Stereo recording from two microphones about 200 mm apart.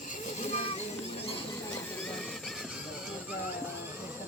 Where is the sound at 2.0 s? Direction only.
Centre (ahead or behind).